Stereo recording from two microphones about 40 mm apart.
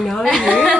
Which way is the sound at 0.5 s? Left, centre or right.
Centre.